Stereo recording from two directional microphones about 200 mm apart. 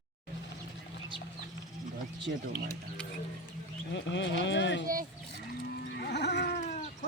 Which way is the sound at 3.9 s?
65° left (ahead or behind).